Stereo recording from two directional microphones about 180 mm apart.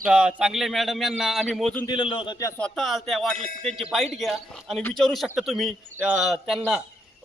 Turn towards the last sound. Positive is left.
turn(degrees=0)  # may be behind; listen again after turning